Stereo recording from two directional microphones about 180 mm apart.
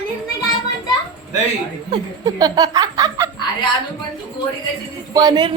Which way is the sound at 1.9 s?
20° right (ahead or behind).